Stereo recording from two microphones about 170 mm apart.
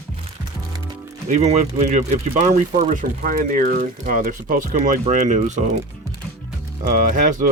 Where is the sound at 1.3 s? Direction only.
40° right (ahead or behind).